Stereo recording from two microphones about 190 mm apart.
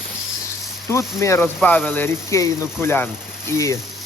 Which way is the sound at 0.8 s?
15° left (ahead or behind).